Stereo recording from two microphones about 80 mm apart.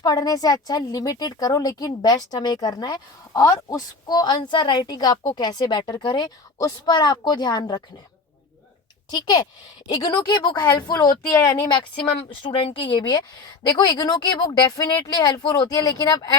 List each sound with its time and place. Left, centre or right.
0.0 s a woman's voice: left
6.2 s a woman's voice: left
9.0 s a woman's voice: left
11.7 s a woman's voice: left
13.7 s speech: left
14.9 s speech: left